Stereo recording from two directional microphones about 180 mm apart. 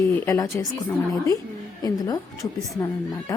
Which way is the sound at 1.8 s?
20° left (ahead or behind).